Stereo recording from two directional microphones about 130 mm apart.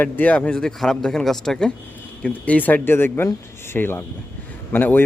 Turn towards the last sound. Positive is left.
turn(degrees=15)  # may be behind; listen again after turning